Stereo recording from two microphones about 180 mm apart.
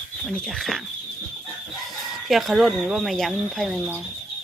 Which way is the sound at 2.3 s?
Centre (ahead or behind).